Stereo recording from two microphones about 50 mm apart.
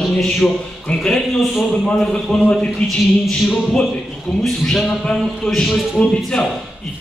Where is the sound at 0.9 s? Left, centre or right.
Left.